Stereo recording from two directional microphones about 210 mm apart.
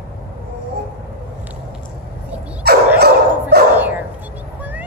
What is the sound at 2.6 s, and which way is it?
Dog, 50° right (ahead or behind).